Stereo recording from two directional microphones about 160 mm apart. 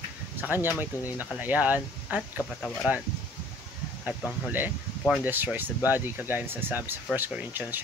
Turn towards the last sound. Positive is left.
turn(degrees=-10)  # may be behind; listen again after turning